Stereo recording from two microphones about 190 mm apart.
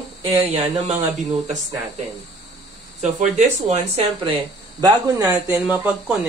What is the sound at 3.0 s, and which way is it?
Speech, 40° right (ahead or behind).